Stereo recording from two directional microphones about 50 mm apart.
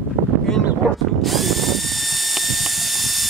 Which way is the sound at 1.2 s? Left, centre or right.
Centre.